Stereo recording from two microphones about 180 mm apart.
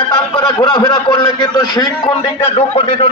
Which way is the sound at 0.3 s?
25° left (ahead or behind).